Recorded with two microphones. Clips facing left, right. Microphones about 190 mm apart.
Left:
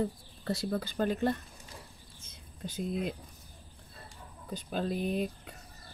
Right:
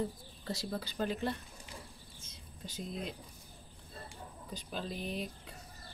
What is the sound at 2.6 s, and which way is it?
Speech, 55° left (ahead or behind).